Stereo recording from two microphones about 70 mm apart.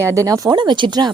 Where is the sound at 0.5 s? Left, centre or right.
Right.